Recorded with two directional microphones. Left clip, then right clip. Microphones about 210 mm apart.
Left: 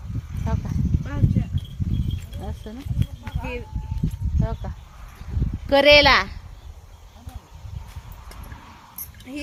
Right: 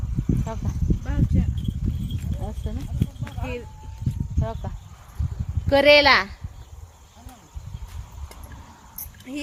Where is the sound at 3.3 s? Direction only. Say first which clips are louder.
Left 2 dB; 20° right (ahead or behind).